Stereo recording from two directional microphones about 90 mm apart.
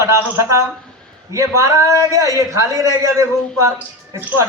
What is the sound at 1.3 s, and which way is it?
A man's voice, 35° right (ahead or behind).